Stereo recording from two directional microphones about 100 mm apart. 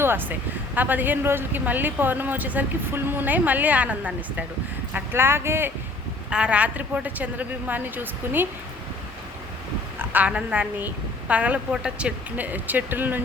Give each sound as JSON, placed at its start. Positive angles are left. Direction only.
{"t": 0.0, "sound": "speech", "side_deg": -20}
{"t": 4.9, "sound": "speech", "side_deg": -25}
{"t": 6.3, "sound": "speech", "side_deg": -10}
{"t": 10.0, "sound": "speech", "side_deg": -15}